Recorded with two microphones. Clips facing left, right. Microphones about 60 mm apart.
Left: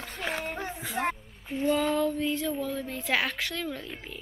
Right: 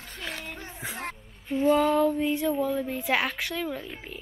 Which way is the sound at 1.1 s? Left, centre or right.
Centre.